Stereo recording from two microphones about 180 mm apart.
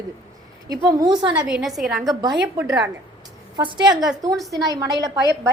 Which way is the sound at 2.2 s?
20° right (ahead or behind).